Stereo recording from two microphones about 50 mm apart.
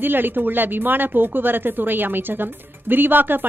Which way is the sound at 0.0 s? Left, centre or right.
Right.